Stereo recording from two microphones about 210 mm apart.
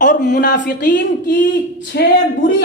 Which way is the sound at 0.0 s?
35° left (ahead or behind).